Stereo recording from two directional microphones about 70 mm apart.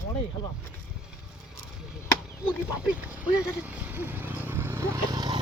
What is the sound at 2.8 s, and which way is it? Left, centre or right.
Speech, right.